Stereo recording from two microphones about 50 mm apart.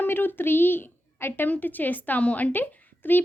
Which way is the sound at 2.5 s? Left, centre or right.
Left.